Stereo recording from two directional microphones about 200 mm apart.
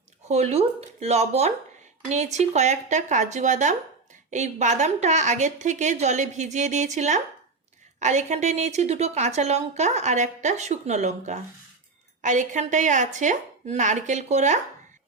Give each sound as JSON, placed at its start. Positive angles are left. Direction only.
{"t": 0.3, "sound": "a woman's voice", "side_deg": -30}